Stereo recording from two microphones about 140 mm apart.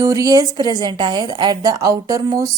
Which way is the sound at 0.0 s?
25° right (ahead or behind).